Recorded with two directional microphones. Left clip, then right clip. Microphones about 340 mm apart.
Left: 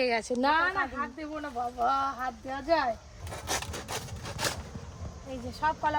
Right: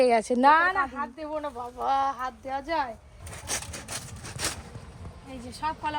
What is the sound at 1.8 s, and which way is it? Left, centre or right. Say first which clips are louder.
Speech: right 3 dB; centre.